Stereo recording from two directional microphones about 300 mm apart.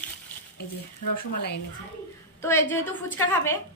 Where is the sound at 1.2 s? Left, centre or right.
Left.